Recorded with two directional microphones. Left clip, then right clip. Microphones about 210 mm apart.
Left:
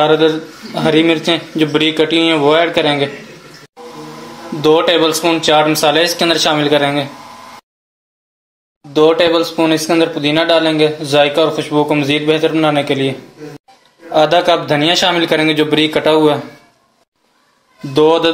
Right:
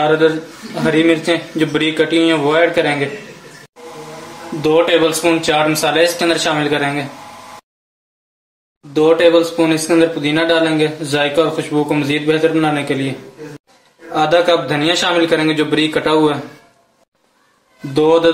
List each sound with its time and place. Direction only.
0.0 s a man's voice: 25° left (ahead or behind)
4.6 s a man's voice: 25° left (ahead or behind)
8.9 s a man's voice: 25° left (ahead or behind)
14.1 s a man's voice: 25° left (ahead or behind)
17.9 s a man's voice: 25° left (ahead or behind)